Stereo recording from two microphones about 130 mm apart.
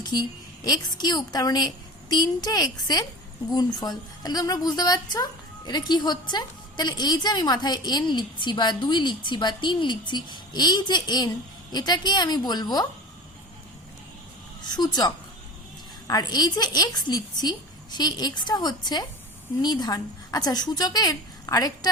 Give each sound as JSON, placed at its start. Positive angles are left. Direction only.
{"t": 0.0, "sound": "a woman's voice", "side_deg": 30}
{"t": 14.6, "sound": "a woman's voice", "side_deg": 35}